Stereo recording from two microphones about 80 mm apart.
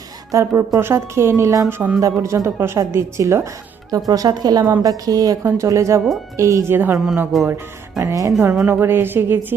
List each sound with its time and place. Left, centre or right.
0.3 s a woman's voice: right
3.9 s a woman's voice: right
6.9 s speech: centre
7.4 s a woman's voice: right
8.6 s speech: right